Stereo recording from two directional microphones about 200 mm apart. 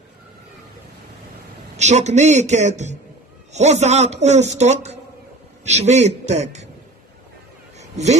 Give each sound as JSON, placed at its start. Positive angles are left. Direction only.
{"t": 1.8, "sound": "a man's voice", "side_deg": -35}